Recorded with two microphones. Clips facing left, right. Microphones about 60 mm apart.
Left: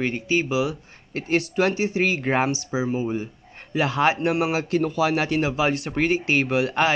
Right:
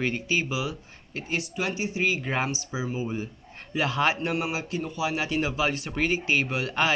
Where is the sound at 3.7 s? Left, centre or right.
Left.